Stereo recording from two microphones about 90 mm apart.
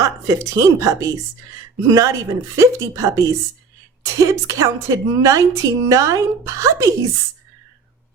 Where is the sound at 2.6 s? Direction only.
35° right (ahead or behind).